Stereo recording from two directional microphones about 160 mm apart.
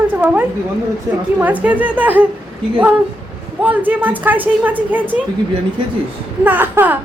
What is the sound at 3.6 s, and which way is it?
A woman's voice, 10° right (ahead or behind).